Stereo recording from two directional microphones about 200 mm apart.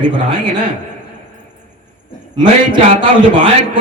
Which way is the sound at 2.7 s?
25° right (ahead or behind).